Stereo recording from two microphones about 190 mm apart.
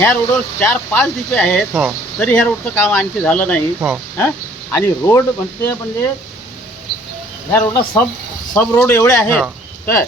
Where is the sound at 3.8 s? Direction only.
10° right (ahead or behind).